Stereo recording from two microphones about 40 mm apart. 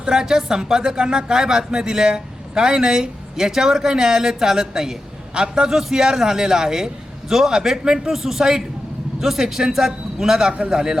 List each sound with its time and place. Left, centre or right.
0.1 s speech: centre